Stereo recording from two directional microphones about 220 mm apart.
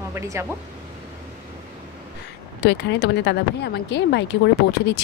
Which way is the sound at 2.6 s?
50° left (ahead or behind).